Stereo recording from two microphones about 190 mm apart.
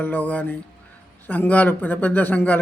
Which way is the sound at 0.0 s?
10° left (ahead or behind).